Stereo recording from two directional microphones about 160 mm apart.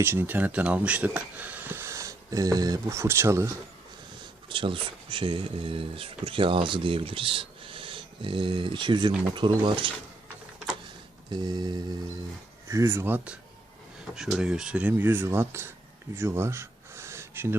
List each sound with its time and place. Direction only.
0.0 s speech: 15° right (ahead or behind)
4.2 s speech: 30° right (ahead or behind)
11.3 s a sound: 25° right (ahead or behind)
12.6 s speech: 15° right (ahead or behind)
16.1 s gasp: 15° right (ahead or behind)